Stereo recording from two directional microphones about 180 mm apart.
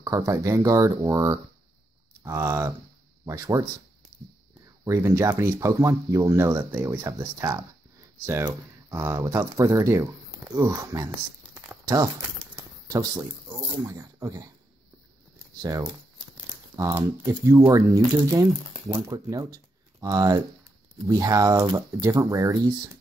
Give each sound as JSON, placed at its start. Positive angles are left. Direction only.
{"t": 0.0, "sound": "speech", "side_deg": -15}
{"t": 2.2, "sound": "speech", "side_deg": -15}
{"t": 4.8, "sound": "speech", "side_deg": -15}
{"t": 16.7, "sound": "speech", "side_deg": -20}